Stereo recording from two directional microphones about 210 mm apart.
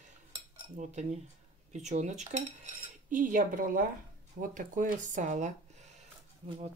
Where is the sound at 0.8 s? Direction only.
35° right (ahead or behind).